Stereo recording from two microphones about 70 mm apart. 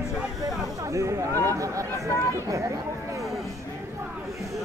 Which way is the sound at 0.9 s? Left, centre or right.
Right.